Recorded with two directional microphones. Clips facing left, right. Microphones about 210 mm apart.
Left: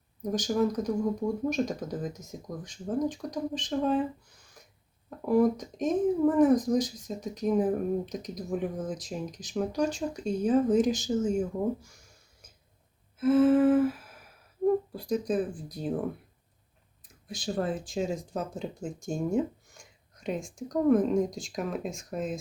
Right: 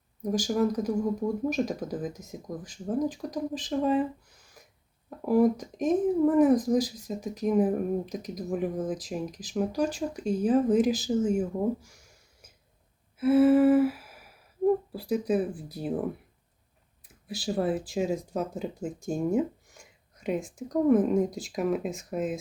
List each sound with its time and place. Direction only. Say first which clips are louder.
0.3 s speech: right 1 dB; 5° right (ahead or behind)
5.2 s speech: right 1 dB; 5° right (ahead or behind)
13.1 s humming: right 2 dB; 10° right (ahead or behind)
14.9 s speech: right 2 dB; 5° right (ahead or behind)
17.1 s speech: right 2 dB; 5° right (ahead or behind)